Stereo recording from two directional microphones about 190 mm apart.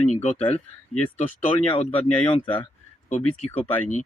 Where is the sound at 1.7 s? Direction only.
25° left (ahead or behind).